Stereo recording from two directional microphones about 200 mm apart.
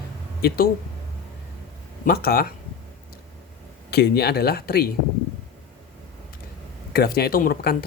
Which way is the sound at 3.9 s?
55° left (ahead or behind).